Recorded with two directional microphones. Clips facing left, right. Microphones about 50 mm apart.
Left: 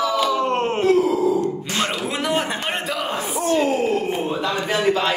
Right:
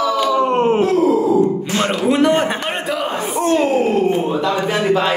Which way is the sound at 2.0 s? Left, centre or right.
Centre.